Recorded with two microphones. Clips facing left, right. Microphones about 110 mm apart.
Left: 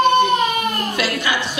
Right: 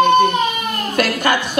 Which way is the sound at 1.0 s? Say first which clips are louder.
Right 4 dB; 50° right (ahead or behind).